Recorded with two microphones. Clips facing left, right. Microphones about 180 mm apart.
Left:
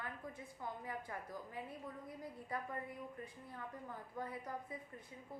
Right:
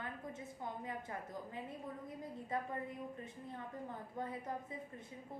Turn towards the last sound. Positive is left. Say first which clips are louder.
# right 3 dB
turn(degrees=-25)  # may be behind; listen again after turning